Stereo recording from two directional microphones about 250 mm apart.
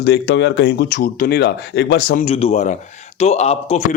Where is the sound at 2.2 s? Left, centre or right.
Left.